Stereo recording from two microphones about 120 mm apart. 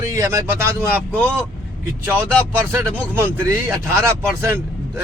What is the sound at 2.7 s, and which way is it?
Speech, 20° right (ahead or behind).